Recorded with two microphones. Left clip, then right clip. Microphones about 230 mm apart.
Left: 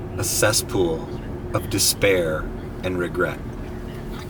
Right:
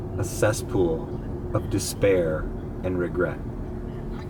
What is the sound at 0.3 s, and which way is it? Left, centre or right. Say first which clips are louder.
Speech: left 4 dB; centre.